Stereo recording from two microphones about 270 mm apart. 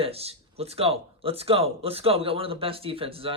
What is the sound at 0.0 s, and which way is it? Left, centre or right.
Speech, right.